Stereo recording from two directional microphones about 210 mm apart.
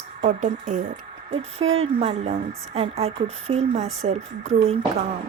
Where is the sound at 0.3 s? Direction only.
35° right (ahead or behind).